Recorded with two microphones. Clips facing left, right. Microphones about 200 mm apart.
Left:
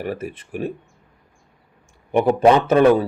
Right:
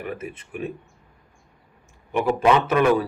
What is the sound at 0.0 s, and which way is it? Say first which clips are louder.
Speech: left 5 dB; 35° left (ahead or behind).